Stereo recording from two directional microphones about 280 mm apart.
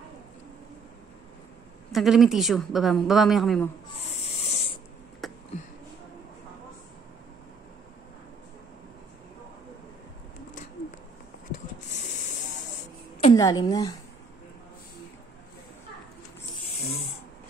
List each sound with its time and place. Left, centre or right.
1.9 s a woman's voice: centre
4.0 s snoring: left
5.2 s a sound: centre
11.5 s a sound: left
13.2 s a woman's voice: centre
16.7 s snoring: left